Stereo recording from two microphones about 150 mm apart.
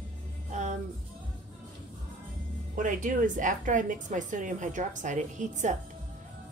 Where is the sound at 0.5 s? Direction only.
50° right (ahead or behind).